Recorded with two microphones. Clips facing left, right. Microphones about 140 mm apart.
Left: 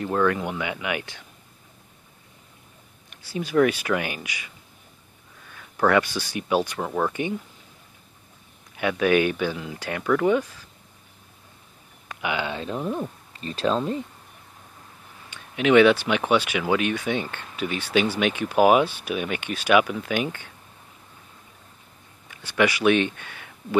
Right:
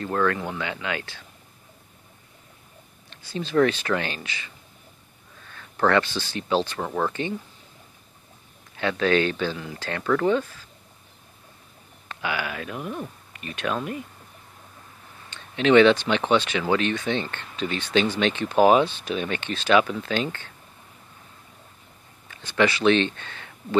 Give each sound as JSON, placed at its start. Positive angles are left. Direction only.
{"t": 0.0, "sound": "speech", "side_deg": 15}
{"t": 3.1, "sound": "speech", "side_deg": 10}
{"t": 5.5, "sound": "speech", "side_deg": 10}
{"t": 8.7, "sound": "speech", "side_deg": 10}
{"t": 12.1, "sound": "speech", "side_deg": 20}
{"t": 15.2, "sound": "speech", "side_deg": 10}
{"t": 22.3, "sound": "speech", "side_deg": 10}